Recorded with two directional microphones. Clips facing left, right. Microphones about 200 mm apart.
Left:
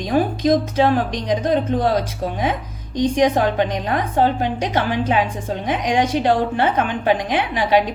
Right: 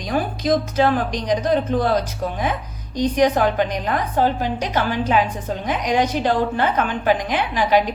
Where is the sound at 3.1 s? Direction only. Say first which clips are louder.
Even; 20° left (ahead or behind).